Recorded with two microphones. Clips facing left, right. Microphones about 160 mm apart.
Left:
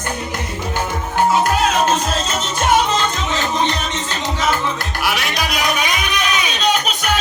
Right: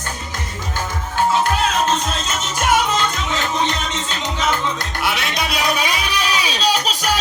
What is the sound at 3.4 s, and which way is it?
Music, 15° left (ahead or behind).